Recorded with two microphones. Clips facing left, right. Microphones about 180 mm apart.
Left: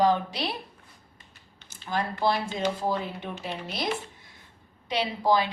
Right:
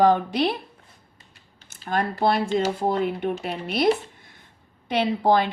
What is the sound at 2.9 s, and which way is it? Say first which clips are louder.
Speech: right 8 dB; 60° right (ahead or behind).